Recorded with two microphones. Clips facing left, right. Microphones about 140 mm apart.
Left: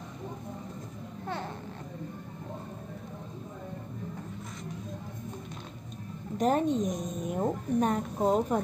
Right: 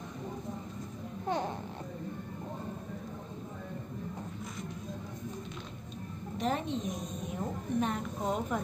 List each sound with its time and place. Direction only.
6.3 s a woman's voice: 45° left (ahead or behind)